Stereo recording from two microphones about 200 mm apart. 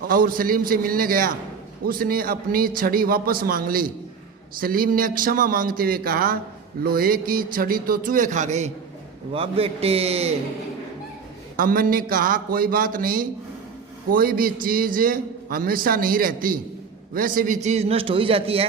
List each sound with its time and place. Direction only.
0.1 s a man's voice: 45° right (ahead or behind)
11.5 s a man's voice: 45° right (ahead or behind); by 18.7 s 30° right (ahead or behind)